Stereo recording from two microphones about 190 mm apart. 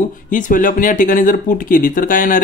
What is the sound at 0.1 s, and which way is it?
Speech, 45° left (ahead or behind).